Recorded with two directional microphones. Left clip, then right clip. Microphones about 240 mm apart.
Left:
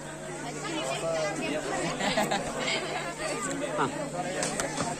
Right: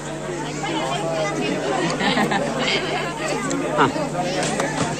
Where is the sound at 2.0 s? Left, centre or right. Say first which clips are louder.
Right 6 dB; left.